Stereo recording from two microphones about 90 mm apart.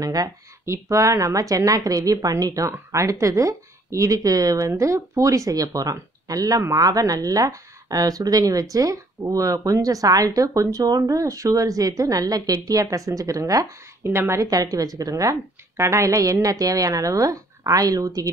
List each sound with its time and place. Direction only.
0.0 s speech: 45° right (ahead or behind)
14.0 s speech: 30° right (ahead or behind)
14.5 s speech: 40° right (ahead or behind)